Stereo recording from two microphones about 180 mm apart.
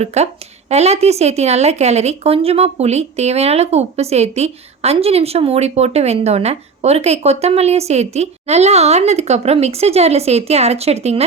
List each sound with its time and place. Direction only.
0.0 s speech: 35° right (ahead or behind)